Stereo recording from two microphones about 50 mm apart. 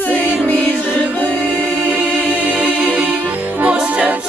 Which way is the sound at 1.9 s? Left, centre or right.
Right.